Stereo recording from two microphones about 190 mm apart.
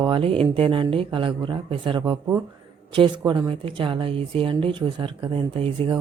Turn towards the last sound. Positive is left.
turn(degrees=-30)  # may be behind; listen again after turning